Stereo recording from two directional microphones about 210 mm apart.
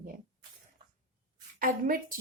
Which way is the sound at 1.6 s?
40° right (ahead or behind).